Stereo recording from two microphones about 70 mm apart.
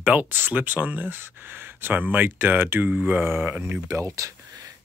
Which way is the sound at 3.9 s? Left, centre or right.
Right.